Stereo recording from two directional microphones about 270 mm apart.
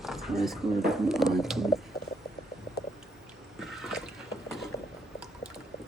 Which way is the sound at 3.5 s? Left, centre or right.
Centre.